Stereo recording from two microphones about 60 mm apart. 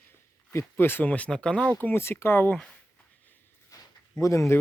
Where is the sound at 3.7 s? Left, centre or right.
Left.